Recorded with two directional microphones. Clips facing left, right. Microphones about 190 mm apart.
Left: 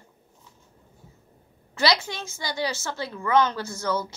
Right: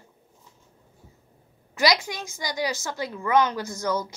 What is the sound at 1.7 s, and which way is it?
A woman's voice, 15° right (ahead or behind).